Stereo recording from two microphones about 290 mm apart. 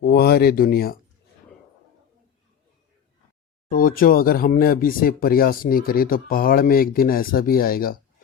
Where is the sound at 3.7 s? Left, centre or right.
Left.